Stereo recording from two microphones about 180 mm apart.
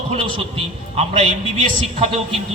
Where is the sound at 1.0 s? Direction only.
35° right (ahead or behind).